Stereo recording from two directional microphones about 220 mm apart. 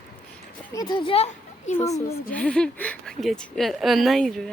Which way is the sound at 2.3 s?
5° left (ahead or behind).